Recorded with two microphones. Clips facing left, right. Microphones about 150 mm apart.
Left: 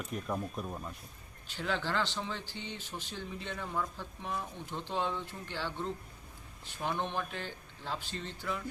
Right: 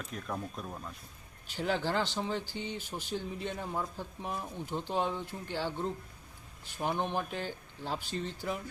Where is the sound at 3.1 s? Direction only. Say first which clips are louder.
Right 5 dB; 35° right (ahead or behind).